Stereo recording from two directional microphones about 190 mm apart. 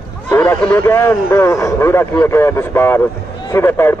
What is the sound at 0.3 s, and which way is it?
A man's voice, 10° left (ahead or behind).